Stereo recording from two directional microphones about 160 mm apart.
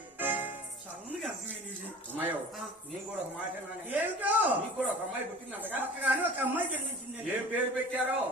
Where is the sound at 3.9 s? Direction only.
10° right (ahead or behind).